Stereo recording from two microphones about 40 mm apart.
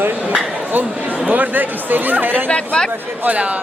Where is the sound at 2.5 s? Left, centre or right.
Left.